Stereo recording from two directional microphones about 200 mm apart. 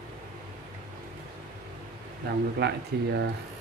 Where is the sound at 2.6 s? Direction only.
55° right (ahead or behind).